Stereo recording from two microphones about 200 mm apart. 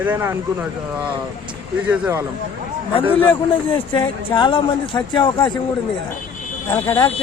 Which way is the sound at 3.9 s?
25° left (ahead or behind).